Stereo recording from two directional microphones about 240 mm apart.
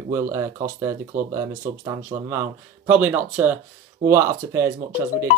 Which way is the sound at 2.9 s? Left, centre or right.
Centre.